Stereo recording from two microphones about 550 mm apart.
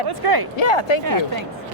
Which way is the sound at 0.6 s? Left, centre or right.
Left.